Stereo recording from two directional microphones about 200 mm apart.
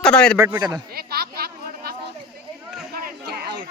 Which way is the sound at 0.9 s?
50° right (ahead or behind).